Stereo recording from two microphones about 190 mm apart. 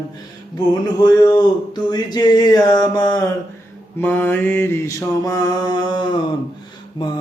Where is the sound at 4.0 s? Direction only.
10° left (ahead or behind).